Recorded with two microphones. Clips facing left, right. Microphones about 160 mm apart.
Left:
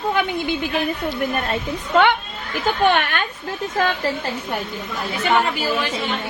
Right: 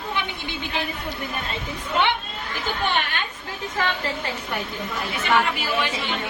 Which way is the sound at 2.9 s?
60° left (ahead or behind).